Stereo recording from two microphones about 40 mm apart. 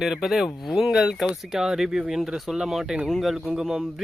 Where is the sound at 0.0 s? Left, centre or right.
Centre.